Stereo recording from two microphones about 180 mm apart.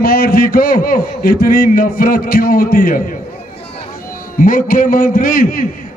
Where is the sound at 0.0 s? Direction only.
55° left (ahead or behind).